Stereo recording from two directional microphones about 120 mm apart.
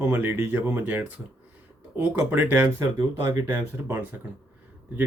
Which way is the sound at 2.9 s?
35° right (ahead or behind).